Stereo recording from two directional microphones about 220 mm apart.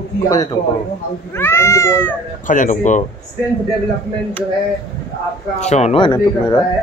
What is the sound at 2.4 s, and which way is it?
Speech, 35° left (ahead or behind).